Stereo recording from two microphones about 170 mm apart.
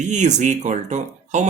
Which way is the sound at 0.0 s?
45° right (ahead or behind).